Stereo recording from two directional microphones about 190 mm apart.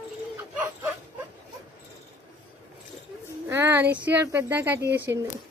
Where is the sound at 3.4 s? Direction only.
10° right (ahead or behind).